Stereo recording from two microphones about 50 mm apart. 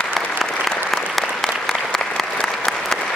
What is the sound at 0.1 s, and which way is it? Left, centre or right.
Applause, centre.